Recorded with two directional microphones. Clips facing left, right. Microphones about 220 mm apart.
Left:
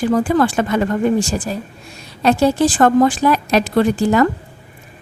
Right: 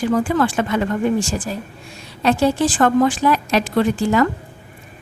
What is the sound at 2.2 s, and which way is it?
A woman's voice, 40° left (ahead or behind).